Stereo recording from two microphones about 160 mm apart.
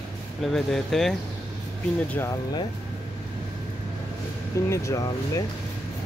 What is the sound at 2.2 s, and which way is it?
Speech, 15° left (ahead or behind).